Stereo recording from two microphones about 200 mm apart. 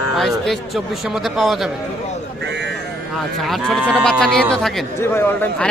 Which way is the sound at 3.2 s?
Centre (ahead or behind).